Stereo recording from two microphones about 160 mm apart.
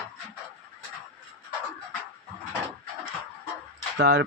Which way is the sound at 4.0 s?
90° right.